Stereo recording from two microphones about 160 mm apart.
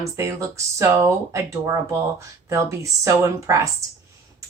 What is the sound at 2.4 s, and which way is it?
Speech, 20° right (ahead or behind).